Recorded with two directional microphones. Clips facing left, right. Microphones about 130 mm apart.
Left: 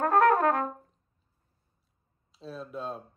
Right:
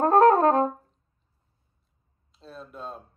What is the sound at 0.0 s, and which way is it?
Brass instrument, 30° right (ahead or behind).